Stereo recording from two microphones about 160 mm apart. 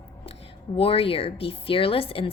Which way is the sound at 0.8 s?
35° left (ahead or behind).